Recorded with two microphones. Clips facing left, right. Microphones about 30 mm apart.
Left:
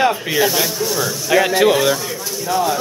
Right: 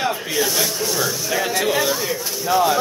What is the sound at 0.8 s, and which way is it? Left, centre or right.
Speech, centre.